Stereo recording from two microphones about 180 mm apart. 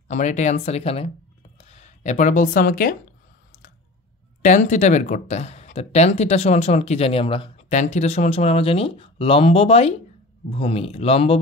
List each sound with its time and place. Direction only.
0.1 s speech: 40° left (ahead or behind)
4.4 s speech: 45° left (ahead or behind)